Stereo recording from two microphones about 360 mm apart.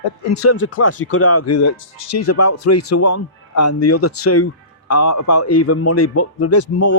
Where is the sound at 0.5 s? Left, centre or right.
Left.